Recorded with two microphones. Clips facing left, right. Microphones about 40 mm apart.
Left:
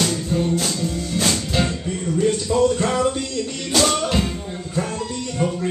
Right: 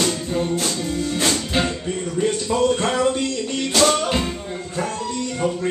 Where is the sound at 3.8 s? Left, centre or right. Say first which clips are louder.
Right 1 dB; centre.